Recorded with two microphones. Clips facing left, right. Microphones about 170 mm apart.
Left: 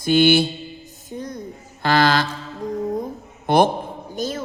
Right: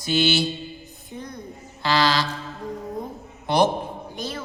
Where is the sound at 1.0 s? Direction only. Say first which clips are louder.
Left 5 dB; 45° left (ahead or behind).